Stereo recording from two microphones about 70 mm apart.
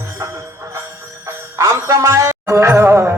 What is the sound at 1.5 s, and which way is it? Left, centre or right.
Music, right.